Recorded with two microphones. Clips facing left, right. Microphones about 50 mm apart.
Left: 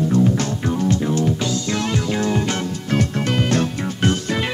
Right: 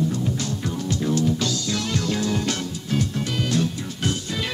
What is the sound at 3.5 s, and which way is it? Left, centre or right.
Music, left.